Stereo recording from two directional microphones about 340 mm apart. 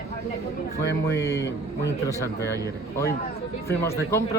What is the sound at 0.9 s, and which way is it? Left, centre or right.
Speech, left.